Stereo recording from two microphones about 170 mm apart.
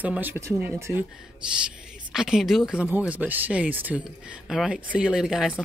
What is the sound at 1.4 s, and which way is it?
Speech, 5° right (ahead or behind).